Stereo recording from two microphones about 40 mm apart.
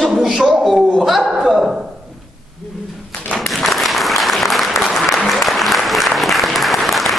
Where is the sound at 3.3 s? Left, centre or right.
Centre.